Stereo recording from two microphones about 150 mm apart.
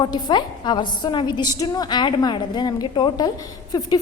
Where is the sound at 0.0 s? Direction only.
30° left (ahead or behind).